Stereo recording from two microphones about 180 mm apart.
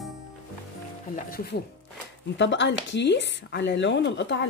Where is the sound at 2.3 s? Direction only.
85° left.